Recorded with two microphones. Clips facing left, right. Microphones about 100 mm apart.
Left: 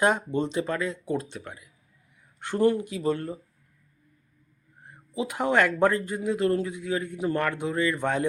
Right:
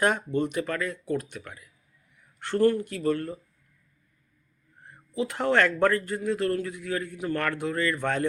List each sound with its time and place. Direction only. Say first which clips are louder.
0.0 s speech: left 1 dB; 20° left (ahead or behind)
4.9 s a man's voice: right 1 dB; 15° left (ahead or behind)